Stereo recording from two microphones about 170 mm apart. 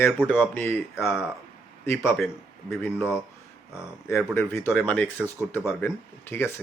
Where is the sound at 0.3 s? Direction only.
10° left (ahead or behind).